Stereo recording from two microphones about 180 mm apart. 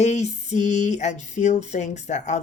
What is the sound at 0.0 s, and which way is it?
Speech, 40° left (ahead or behind).